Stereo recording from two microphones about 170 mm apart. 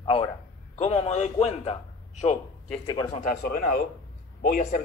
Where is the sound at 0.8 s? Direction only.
35° left (ahead or behind).